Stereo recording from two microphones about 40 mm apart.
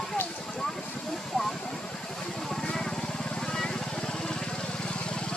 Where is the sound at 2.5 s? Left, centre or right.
Centre.